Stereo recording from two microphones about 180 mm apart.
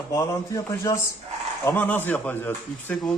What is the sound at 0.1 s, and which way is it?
A man's voice, 20° left (ahead or behind).